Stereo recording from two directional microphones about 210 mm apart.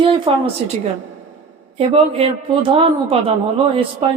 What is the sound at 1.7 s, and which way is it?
Speech, 30° right (ahead or behind).